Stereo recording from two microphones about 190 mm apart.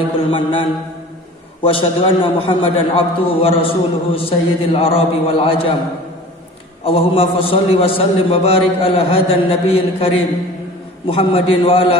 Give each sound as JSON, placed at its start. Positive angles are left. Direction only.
{"t": 0.3, "sound": "a man's voice", "side_deg": 25}
{"t": 6.8, "sound": "a man's voice", "side_deg": 30}